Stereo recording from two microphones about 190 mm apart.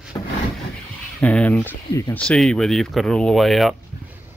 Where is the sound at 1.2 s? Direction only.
5° left (ahead or behind).